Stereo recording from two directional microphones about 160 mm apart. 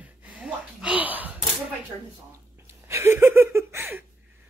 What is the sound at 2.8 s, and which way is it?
Laughter, 15° right (ahead or behind).